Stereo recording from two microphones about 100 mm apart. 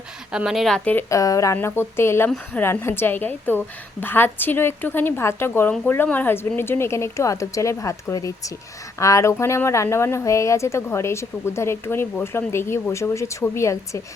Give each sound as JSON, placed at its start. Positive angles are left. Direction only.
{"t": 0.3, "sound": "speech", "side_deg": -5}
{"t": 1.1, "sound": "speech", "side_deg": 35}
{"t": 1.5, "sound": "a woman's voice", "side_deg": 25}